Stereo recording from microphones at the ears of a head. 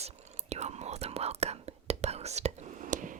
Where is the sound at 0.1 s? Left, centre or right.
Right.